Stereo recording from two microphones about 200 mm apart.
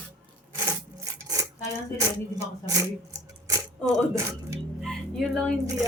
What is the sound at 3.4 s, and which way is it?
Speech, 15° right (ahead or behind).